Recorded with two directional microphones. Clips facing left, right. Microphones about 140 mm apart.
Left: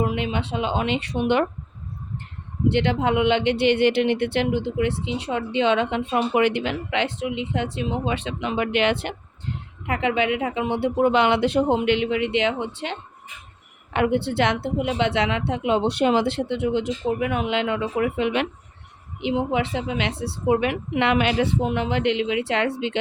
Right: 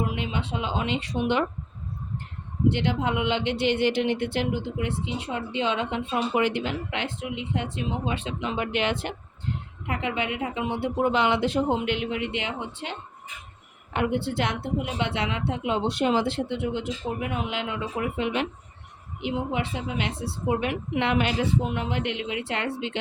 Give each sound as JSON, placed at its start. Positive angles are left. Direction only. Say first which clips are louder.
{"t": 0.2, "sound": "speech", "louder": "left 4 dB", "side_deg": 65}
{"t": 2.6, "sound": "speech", "louder": "left 4 dB", "side_deg": 65}
{"t": 9.8, "sound": "speech", "louder": "left 6 dB", "side_deg": 90}
{"t": 19.2, "sound": "a woman's voice", "louder": "left 5 dB", "side_deg": 90}